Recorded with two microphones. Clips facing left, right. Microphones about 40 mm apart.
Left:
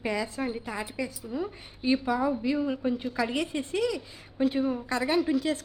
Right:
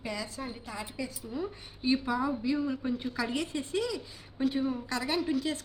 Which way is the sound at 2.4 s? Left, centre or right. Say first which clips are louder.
Left 3 dB; left.